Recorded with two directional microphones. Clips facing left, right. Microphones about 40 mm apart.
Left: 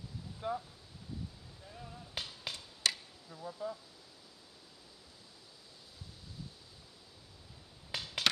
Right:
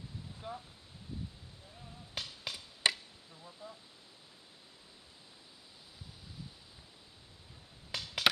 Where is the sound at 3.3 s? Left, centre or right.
Left.